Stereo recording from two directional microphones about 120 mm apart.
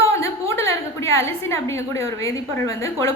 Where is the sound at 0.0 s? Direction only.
25° left (ahead or behind).